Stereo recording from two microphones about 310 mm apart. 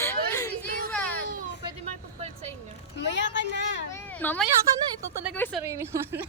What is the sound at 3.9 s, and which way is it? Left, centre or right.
A child's voice, centre.